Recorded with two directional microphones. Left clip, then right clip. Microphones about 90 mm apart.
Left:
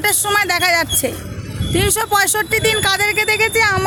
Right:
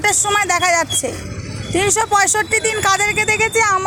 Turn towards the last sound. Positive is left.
turn(degrees=20)  # may be behind; listen again after turning